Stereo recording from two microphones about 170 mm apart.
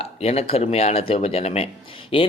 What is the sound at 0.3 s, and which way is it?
A man's voice, 40° left (ahead or behind).